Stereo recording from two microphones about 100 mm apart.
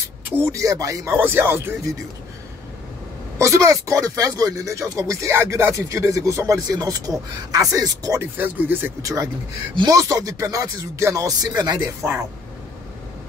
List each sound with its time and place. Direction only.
0.4 s speech: 30° right (ahead or behind)
1.0 s speech: 20° right (ahead or behind)
3.3 s speech: 30° right (ahead or behind)
8.2 s speech: 20° right (ahead or behind)
9.0 s speech: 35° right (ahead or behind)
12.0 s speech: 25° right (ahead or behind)